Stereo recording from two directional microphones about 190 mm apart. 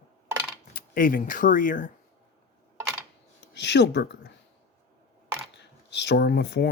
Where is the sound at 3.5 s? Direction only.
65° left (ahead or behind).